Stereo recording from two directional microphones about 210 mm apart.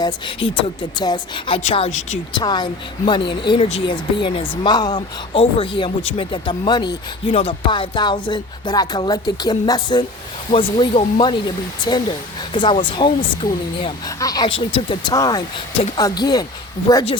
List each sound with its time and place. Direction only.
0.0 s speech: 25° left (ahead or behind)